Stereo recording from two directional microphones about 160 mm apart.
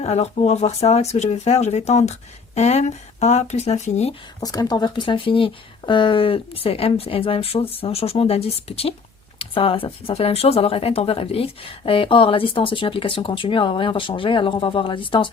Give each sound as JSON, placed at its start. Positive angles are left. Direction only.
{"t": 0.0, "sound": "speech", "side_deg": 40}
{"t": 4.4, "sound": "speech", "side_deg": 25}